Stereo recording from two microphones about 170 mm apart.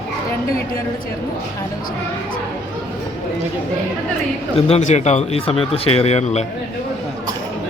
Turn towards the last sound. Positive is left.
turn(degrees=40)  # may be behind; listen again after turning